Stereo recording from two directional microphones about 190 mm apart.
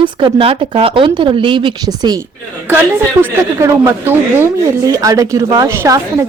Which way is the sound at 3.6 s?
15° right (ahead or behind).